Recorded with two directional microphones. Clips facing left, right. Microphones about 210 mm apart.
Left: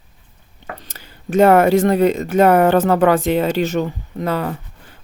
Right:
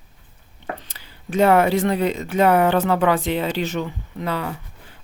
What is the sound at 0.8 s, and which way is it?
Speech, 45° left (ahead or behind).